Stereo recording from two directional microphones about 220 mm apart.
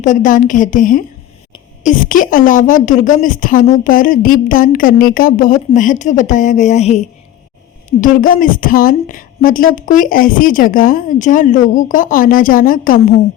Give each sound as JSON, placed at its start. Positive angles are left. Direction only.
{"t": 0.0, "sound": "a woman's voice", "side_deg": 35}